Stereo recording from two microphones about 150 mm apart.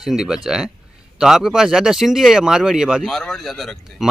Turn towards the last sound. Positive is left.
turn(degrees=0)  # may be behind; listen again after turning